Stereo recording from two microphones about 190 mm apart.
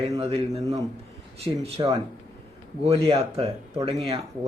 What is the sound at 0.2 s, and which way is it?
Speech, 30° right (ahead or behind).